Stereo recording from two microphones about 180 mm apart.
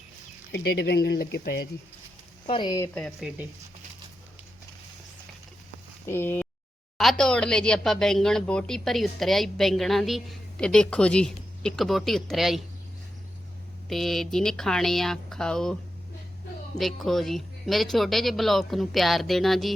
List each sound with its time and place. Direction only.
0.5 s speech: 65° left (ahead or behind)
2.5 s speech: 25° left (ahead or behind)
3.0 s speech: centre (ahead or behind)
6.1 s speech: 10° left (ahead or behind)
13.9 s speech: centre (ahead or behind)